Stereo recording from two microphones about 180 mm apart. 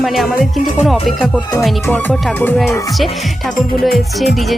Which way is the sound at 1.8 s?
10° left (ahead or behind).